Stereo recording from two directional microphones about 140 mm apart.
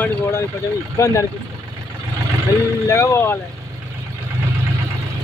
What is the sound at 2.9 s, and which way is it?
Speech, 20° left (ahead or behind).